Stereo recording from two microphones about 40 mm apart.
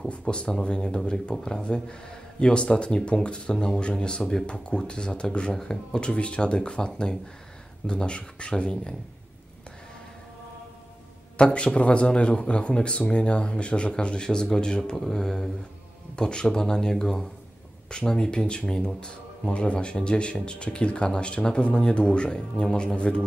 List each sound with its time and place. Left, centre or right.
0.1 s speech: left
11.3 s speech: left